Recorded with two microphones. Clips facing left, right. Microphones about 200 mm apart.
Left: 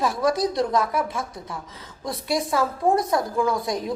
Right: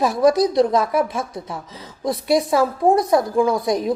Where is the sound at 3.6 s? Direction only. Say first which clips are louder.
Right 7 dB; 15° right (ahead or behind).